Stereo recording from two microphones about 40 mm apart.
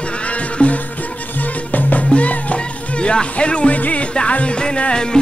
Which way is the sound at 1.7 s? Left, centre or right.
Left.